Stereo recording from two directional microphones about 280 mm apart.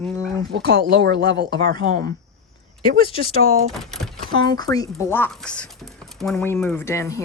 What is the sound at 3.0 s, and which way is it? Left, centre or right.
Speech, centre.